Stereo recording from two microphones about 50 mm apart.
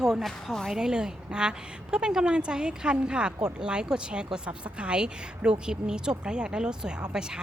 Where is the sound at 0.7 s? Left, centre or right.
Centre.